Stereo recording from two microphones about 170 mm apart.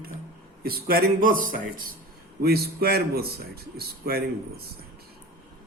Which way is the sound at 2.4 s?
65° right (ahead or behind).